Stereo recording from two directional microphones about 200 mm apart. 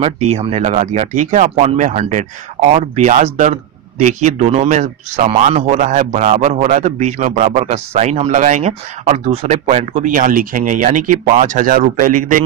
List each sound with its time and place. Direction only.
0.3 s speech: 30° right (ahead or behind)